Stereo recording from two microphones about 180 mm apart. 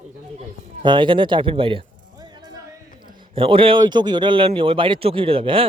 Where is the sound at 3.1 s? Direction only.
30° right (ahead or behind).